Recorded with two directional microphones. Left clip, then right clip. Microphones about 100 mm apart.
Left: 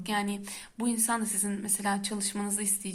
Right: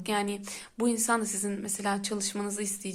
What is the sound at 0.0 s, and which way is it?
A woman's voice, 35° right (ahead or behind).